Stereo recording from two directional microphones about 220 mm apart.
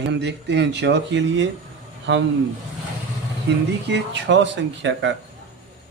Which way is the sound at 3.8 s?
50° right (ahead or behind).